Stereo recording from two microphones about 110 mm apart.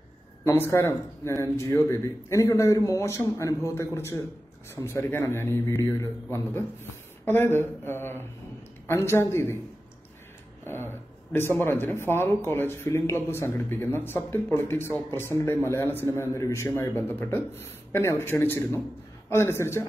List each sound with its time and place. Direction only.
0.5 s speech: 25° left (ahead or behind)
10.6 s a sound: 20° left (ahead or behind)
11.6 s speech: 20° left (ahead or behind)